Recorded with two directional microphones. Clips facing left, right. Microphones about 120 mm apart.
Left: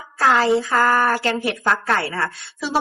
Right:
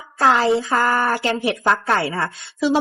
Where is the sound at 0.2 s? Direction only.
25° right (ahead or behind).